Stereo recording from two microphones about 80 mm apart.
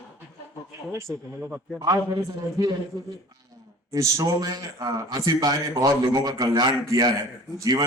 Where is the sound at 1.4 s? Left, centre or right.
Centre.